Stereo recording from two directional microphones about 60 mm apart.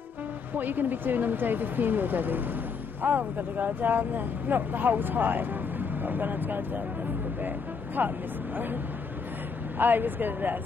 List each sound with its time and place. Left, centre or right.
0.6 s speech: right
9.8 s speech: right